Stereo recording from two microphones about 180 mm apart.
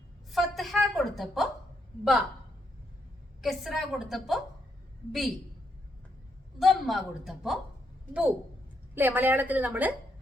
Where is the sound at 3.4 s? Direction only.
Centre (ahead or behind).